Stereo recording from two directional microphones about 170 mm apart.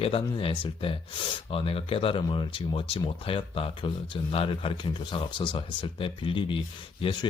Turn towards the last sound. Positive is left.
turn(degrees=30)  # may be behind; listen again after turning